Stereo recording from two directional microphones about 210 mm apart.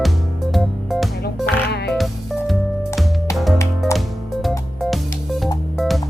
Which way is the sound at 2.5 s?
Centre (ahead or behind).